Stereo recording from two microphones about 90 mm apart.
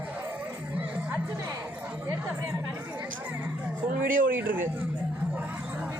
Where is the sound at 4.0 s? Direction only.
20° right (ahead or behind).